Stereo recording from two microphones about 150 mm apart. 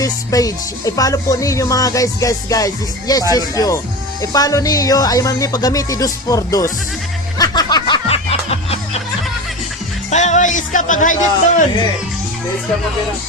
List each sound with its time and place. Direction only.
0.0 s music: 25° left (ahead or behind); by 9.0 s 45° left (ahead or behind)
10.1 s speech: 50° left (ahead or behind)